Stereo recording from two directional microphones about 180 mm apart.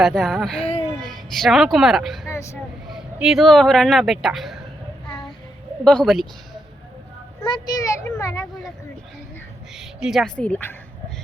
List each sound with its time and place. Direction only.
0.0 s speech: centre (ahead or behind)
2.3 s speech: 15° left (ahead or behind)
2.9 s speech: centre (ahead or behind)
5.8 s speech: 5° left (ahead or behind)
7.4 s a child's voice: 25° left (ahead or behind)
9.7 s speech: centre (ahead or behind)